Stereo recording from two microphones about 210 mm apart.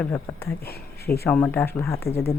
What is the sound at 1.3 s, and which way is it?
Speech, 5° left (ahead or behind).